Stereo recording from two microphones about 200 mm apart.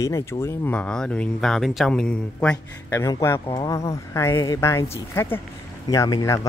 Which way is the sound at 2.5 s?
15° left (ahead or behind).